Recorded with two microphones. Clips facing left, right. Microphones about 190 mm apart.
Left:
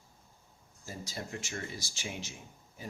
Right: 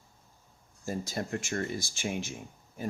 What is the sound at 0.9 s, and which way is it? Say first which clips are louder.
Speech: right 8 dB; 55° right (ahead or behind).